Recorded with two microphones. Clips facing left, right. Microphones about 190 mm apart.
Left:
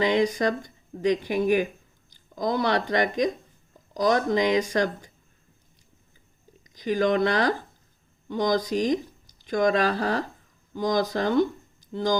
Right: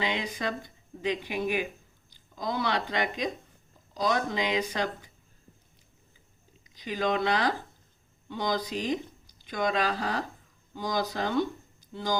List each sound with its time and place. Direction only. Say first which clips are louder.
0.0 s speech: left 9 dB; 45° left (ahead or behind)
6.7 s speech: left 6 dB; 45° left (ahead or behind)